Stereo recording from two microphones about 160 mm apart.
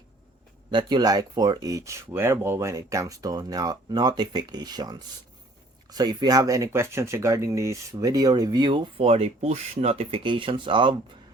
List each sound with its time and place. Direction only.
0.7 s speech: 30° right (ahead or behind)